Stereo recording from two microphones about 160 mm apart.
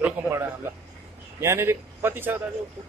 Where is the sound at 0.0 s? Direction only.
10° right (ahead or behind).